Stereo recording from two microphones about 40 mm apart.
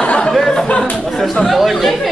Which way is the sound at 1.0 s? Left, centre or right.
Centre.